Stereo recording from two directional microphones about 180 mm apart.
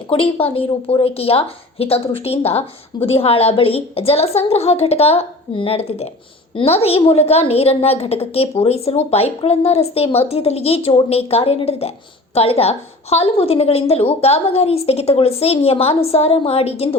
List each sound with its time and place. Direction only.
0.1 s a woman's voice: 30° left (ahead or behind)